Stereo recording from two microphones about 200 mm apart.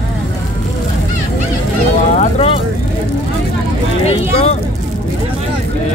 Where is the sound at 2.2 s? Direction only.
30° left (ahead or behind).